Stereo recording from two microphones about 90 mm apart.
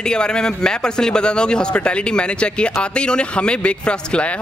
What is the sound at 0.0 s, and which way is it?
A man's voice, 10° left (ahead or behind).